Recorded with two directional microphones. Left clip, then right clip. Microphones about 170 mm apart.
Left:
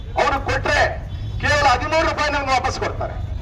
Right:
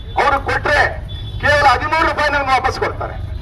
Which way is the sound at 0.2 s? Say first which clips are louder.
Right 4 dB; 30° left (ahead or behind).